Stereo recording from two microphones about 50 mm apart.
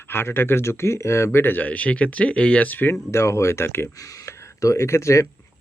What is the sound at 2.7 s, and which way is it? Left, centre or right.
Speech, left.